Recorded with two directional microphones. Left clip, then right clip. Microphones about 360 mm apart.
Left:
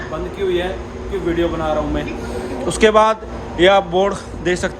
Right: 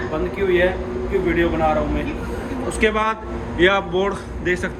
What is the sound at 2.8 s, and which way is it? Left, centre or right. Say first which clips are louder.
A man's voice: left 7 dB; centre.